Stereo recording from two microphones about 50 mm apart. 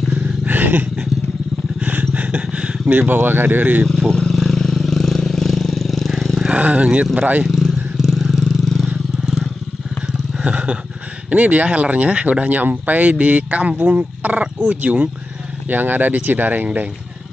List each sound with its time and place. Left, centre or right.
0.1 s dog: right
1.8 s vehicle: right
2.4 s a sound: centre
2.9 s speech: right
3.9 s vehicle: centre
6.5 s speech: right
7.4 s vehicle: centre
8.5 s vehicle: centre
10.4 s speech: right
15.7 s speech: right